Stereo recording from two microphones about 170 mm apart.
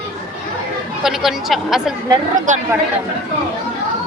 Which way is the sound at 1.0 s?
Centre (ahead or behind).